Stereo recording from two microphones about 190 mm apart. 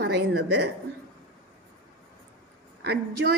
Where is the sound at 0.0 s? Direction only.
60° right (ahead or behind).